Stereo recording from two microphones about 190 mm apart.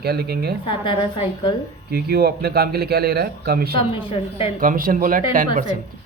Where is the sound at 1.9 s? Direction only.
55° right (ahead or behind).